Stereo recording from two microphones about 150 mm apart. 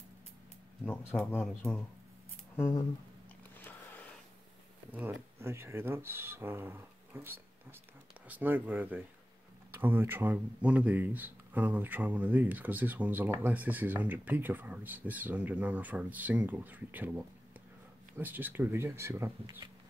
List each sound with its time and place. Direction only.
0.8 s speech: 5° left (ahead or behind)
3.5 s a sound: 10° left (ahead or behind)
4.9 s speech: 15° right (ahead or behind)